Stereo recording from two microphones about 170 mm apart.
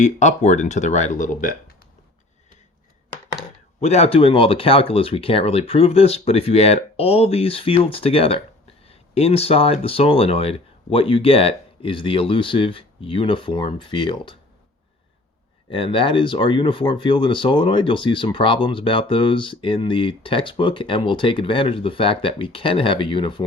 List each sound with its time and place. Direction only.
0.0 s speech: 45° left (ahead or behind)
3.8 s speech: 40° left (ahead or behind)
15.7 s speech: 30° left (ahead or behind)